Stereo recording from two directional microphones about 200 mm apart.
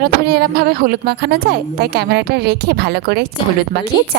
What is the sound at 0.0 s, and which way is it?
Speech, 50° right (ahead or behind).